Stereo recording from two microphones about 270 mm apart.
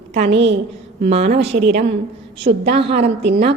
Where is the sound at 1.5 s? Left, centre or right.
Right.